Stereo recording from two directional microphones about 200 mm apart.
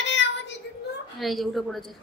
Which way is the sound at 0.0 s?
65° left (ahead or behind).